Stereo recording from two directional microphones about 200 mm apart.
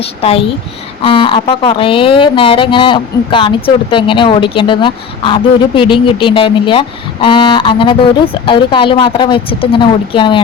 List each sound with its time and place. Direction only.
0.0 s speech: 30° left (ahead or behind)